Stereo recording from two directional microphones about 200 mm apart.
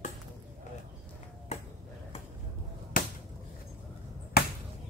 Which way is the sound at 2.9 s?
45° left (ahead or behind).